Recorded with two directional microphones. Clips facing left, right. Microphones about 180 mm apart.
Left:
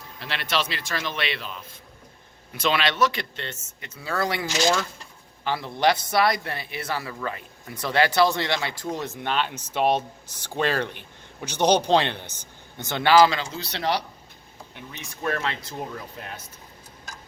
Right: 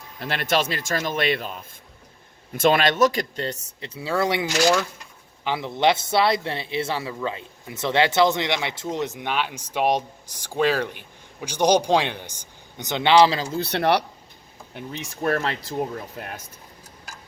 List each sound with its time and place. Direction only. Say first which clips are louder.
0.2 s a man's voice: right 5 dB; 50° right (ahead or behind); by 13.5 s 30° right (ahead or behind)
13.5 s speech: right 6 dB; 55° right (ahead or behind)
15.2 s a man's voice: right 4 dB; 40° right (ahead or behind)